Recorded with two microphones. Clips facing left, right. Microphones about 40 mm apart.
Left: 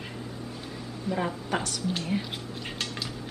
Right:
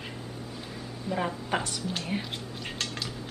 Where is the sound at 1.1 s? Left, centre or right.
Centre.